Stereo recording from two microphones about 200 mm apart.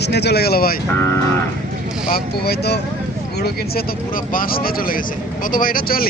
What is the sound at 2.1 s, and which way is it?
Speech, 55° left (ahead or behind).